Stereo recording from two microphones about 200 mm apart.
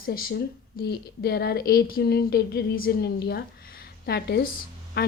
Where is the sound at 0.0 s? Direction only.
50° left (ahead or behind).